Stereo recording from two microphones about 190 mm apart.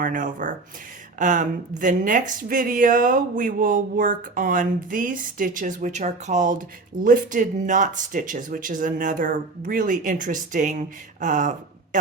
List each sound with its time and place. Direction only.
0.0 s a woman's voice: 45° right (ahead or behind)